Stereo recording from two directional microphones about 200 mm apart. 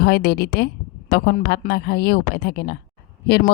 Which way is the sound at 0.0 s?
55° left (ahead or behind).